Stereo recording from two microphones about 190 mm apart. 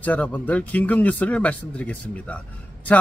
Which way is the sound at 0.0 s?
5° left (ahead or behind).